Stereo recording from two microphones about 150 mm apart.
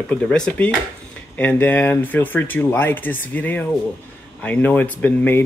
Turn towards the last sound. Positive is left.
turn(degrees=10)  # may be behind; listen again after turning